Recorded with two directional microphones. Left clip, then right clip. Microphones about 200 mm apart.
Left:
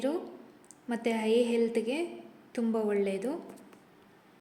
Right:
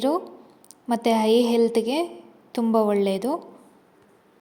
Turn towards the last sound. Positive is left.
turn(degrees=-30)  # may be behind; listen again after turning